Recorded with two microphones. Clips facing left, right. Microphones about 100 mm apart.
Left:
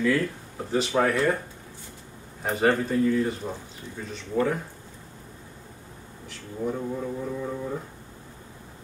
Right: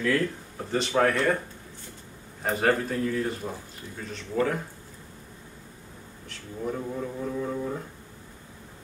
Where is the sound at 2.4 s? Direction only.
Centre (ahead or behind).